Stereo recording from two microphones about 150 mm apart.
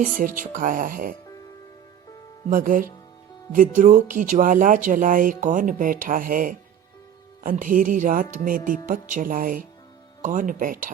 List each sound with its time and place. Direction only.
0.0 s speech: 60° right (ahead or behind)
2.5 s speech: 65° right (ahead or behind)